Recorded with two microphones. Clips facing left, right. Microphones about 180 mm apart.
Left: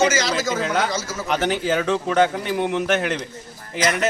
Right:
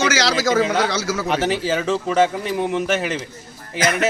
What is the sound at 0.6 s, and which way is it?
Speech, centre (ahead or behind).